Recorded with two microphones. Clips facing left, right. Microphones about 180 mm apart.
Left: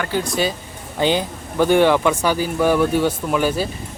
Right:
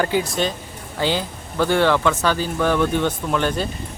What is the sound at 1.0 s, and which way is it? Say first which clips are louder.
Speech: left 3 dB; 20° left (ahead or behind).